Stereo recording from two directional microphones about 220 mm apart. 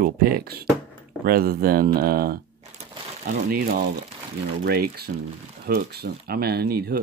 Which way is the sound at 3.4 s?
40° right (ahead or behind).